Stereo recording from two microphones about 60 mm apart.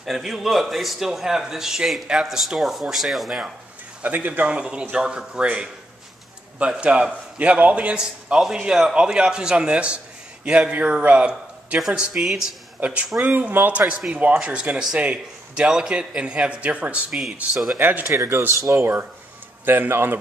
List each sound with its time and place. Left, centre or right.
0.0 s speech: centre
4.0 s a man's voice: right
6.8 s speech: centre
12.8 s a man's voice: right
13.8 s a man's voice: centre
17.7 s speech: right
18.1 s speech: right
18.8 s speech: right